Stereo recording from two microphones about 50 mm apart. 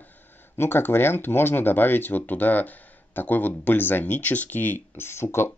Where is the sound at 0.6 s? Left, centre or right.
Left.